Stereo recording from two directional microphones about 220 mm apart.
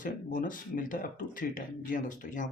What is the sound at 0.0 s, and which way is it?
Speech, 40° left (ahead or behind).